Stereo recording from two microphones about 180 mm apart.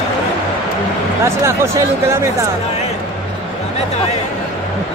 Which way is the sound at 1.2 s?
15° right (ahead or behind).